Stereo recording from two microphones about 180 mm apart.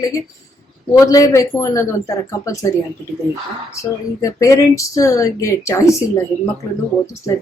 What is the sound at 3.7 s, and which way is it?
Speech, 15° left (ahead or behind).